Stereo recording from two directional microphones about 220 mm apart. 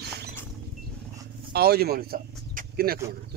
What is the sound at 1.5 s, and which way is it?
Chicken, 45° right (ahead or behind).